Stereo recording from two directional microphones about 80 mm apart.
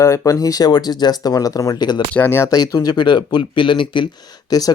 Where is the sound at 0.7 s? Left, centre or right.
Left.